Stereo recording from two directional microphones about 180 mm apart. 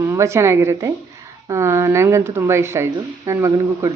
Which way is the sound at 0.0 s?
15° right (ahead or behind).